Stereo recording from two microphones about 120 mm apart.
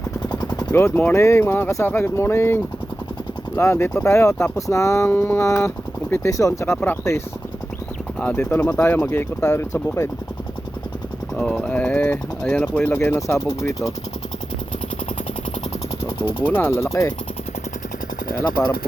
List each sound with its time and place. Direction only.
0.3 s machine gun: 35° left (ahead or behind)
0.7 s speech: 20° left (ahead or behind)
8.4 s speech: 10° left (ahead or behind)
11.3 s speech: 5° left (ahead or behind); by 13.9 s 25° left (ahead or behind)
16.0 s jackhammer: 50° left (ahead or behind)
16.5 s speech: 15° left (ahead or behind)